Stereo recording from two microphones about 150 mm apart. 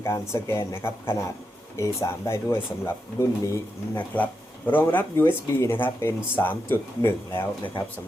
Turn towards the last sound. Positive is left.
turn(degrees=15)  # may be behind; listen again after turning